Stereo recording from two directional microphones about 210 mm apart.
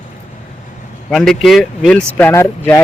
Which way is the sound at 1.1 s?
Centre (ahead or behind).